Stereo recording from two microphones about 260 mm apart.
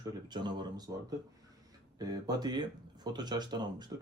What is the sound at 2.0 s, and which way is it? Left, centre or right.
Speech, centre.